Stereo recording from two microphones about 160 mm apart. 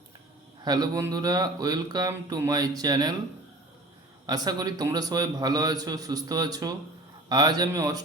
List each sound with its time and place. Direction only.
0.6 s speech: 25° right (ahead or behind)
4.3 s speech: 25° right (ahead or behind)